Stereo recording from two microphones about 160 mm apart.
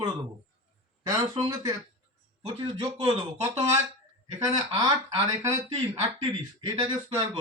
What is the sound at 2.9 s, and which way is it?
Speech, 40° right (ahead or behind).